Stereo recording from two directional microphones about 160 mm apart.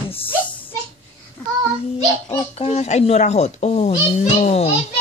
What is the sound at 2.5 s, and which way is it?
A child's voice, 40° left (ahead or behind).